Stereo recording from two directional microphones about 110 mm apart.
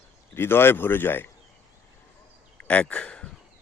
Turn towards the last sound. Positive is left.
turn(degrees=10)  # may be behind; listen again after turning